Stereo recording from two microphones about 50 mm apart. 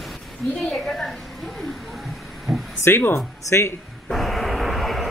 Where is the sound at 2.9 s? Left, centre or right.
Left.